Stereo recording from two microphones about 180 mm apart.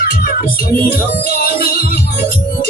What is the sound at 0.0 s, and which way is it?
Music, 55° left (ahead or behind).